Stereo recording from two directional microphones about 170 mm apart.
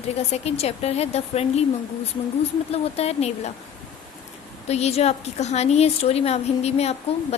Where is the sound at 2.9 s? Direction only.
40° left (ahead or behind).